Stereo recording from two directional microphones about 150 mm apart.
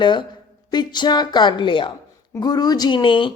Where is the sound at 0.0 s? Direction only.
30° left (ahead or behind).